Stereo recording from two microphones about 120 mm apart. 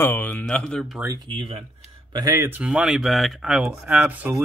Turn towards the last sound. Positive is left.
turn(degrees=-15)  # may be behind; listen again after turning